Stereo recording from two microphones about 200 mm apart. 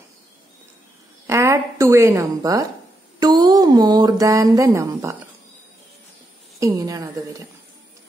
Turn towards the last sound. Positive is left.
turn(degrees=-15)  # may be behind; listen again after turning